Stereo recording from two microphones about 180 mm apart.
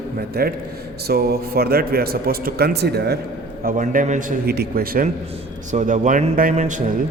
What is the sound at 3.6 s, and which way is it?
Speech, 50° right (ahead or behind).